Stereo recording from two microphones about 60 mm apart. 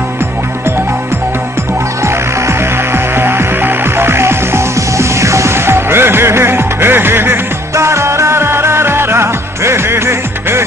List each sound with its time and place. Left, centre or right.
2.0 s music: right
7.7 s music: right